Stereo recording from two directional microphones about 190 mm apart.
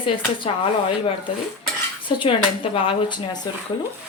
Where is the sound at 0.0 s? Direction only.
25° left (ahead or behind).